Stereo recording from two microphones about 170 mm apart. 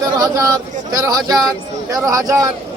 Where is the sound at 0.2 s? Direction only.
20° right (ahead or behind).